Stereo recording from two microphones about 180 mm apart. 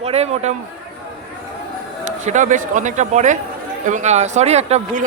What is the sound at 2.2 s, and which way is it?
Speech, 45° right (ahead or behind).